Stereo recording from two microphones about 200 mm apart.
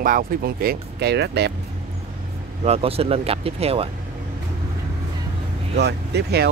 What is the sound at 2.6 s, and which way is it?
Speech, 30° right (ahead or behind).